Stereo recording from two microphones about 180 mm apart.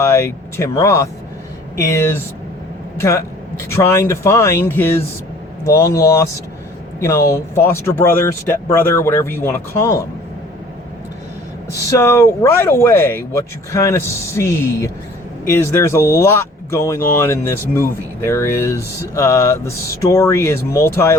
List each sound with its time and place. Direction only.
0.0 s speech: 15° left (ahead or behind)
11.9 s speech: 15° left (ahead or behind)